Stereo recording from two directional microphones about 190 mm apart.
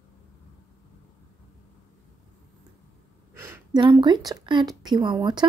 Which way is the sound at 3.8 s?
25° right (ahead or behind).